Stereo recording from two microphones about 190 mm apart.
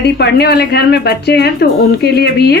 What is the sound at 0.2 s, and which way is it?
A woman's voice, 60° left (ahead or behind).